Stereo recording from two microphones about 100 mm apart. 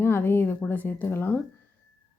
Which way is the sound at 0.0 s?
20° left (ahead or behind).